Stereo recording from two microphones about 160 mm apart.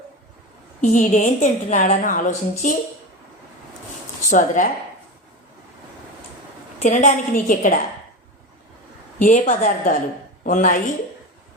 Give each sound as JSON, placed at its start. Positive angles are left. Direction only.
{"t": 0.8, "sound": "a woman's voice", "side_deg": 50}
{"t": 4.3, "sound": "a woman's voice", "side_deg": 55}
{"t": 6.8, "sound": "a woman's voice", "side_deg": 50}
{"t": 9.1, "sound": "a woman's voice", "side_deg": 50}